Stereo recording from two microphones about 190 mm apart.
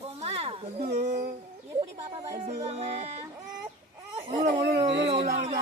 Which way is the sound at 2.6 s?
35° right (ahead or behind).